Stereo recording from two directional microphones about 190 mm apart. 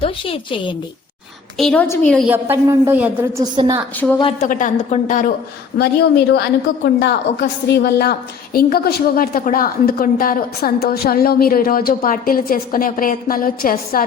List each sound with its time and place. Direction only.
0.0 s a woman's voice: 25° left (ahead or behind)
1.5 s a woman's voice: 5° left (ahead or behind)
2.2 s a woman's voice: 10° right (ahead or behind)
3.4 s a woman's voice: 20° right (ahead or behind)
4.0 s a woman's voice: centre (ahead or behind)
4.4 s a woman's voice: 40° left (ahead or behind)
5.7 s a woman's voice: 60° left (ahead or behind)